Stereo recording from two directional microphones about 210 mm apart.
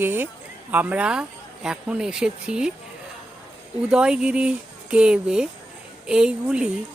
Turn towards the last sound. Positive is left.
turn(degrees=-5)  # may be behind; listen again after turning